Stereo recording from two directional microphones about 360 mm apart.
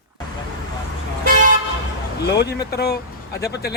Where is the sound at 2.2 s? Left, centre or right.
Left.